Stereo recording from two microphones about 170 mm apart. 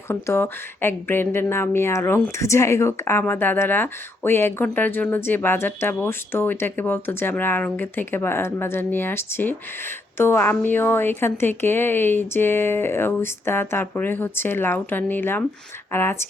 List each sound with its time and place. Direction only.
0.1 s speech: 15° left (ahead or behind)